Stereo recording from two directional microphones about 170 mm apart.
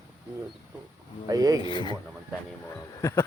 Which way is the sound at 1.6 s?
25° left (ahead or behind).